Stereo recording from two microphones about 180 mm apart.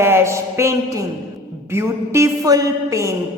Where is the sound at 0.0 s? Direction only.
15° right (ahead or behind).